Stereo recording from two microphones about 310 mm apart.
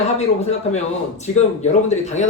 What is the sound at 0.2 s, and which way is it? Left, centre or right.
Speech, left.